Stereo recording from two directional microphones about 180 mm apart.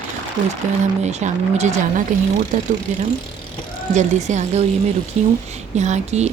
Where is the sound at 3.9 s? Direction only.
40° right (ahead or behind).